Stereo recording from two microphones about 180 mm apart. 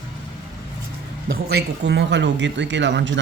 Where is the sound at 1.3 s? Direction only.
65° right (ahead or behind); by 3.1 s 85° right.